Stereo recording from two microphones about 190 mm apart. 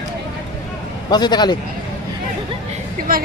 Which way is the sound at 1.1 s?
20° left (ahead or behind).